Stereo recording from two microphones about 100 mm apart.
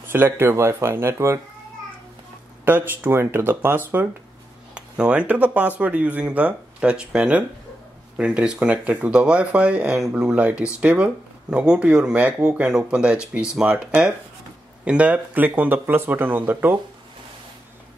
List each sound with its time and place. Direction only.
0.1 s speech: 25° right (ahead or behind)
2.6 s speech: 20° right (ahead or behind)